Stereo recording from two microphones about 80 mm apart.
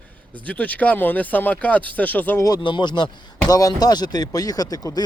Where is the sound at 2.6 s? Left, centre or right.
Left.